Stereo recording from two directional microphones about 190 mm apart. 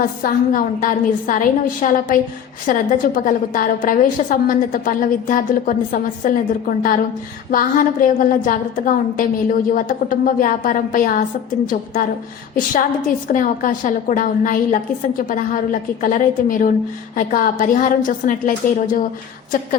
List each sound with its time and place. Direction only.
0.2 s a woman's voice: 45° left (ahead or behind)
7.5 s a woman's voice: 45° left (ahead or behind)
12.5 s a woman's voice: 45° left (ahead or behind)